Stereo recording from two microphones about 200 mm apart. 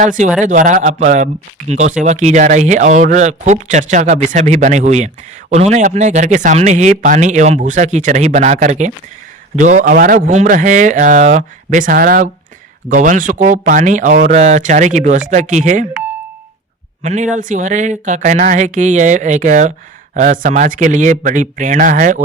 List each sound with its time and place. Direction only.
0.0 s speech: 40° right (ahead or behind)
17.0 s speech: 35° right (ahead or behind)